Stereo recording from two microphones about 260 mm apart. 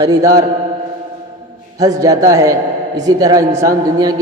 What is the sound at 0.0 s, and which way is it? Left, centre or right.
Speech, centre.